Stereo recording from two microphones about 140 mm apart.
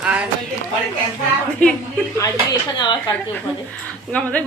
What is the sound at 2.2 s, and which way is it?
Speech, 30° left (ahead or behind).